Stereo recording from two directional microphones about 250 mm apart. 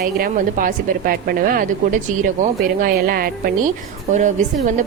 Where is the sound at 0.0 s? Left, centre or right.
Right.